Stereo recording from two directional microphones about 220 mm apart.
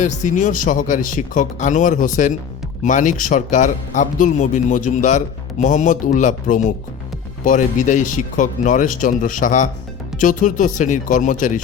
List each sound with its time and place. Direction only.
0.0 s a man's voice: 35° left (ahead or behind)